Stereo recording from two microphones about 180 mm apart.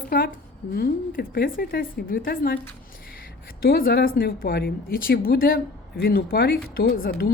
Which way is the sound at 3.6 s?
55° left (ahead or behind).